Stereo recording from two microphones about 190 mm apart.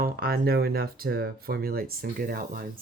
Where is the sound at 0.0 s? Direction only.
50° right (ahead or behind).